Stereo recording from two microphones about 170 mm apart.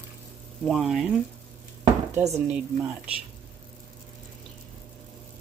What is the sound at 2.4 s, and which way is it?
Speech, 5° right (ahead or behind).